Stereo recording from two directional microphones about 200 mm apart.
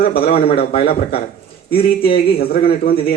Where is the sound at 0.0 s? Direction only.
50° left (ahead or behind).